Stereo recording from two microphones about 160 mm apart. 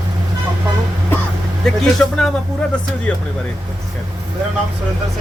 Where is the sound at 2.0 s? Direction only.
5° left (ahead or behind).